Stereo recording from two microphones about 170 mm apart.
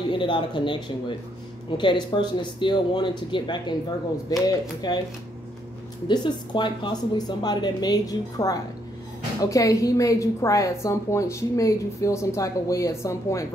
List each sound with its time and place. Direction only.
0.1 s a woman's voice: 30° left (ahead or behind)
6.0 s a woman's voice: 25° left (ahead or behind)